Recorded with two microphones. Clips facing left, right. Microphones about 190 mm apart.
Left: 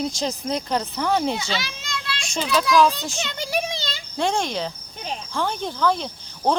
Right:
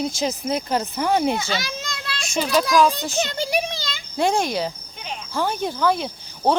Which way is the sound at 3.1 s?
35° right (ahead or behind).